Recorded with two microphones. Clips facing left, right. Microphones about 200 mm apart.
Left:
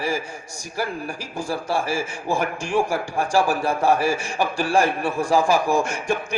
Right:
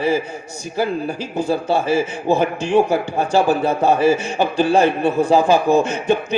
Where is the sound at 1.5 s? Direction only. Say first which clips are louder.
Right 6 dB; 20° right (ahead or behind).